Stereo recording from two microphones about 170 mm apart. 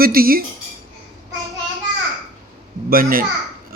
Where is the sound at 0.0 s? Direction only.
60° right (ahead or behind).